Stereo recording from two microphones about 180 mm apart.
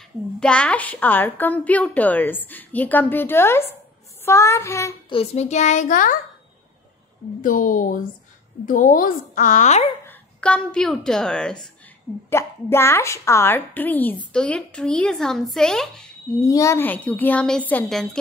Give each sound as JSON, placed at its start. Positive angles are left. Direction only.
{"t": 0.4, "sound": "a woman's voice", "side_deg": 5}
{"t": 5.1, "sound": "a child's voice", "side_deg": 35}
{"t": 7.4, "sound": "a woman's voice", "side_deg": 50}
{"t": 10.0, "sound": "a woman's voice", "side_deg": 5}
{"t": 16.3, "sound": "a woman's voice", "side_deg": 15}